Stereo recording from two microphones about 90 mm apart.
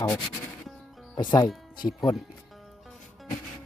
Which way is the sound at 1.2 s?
50° left (ahead or behind).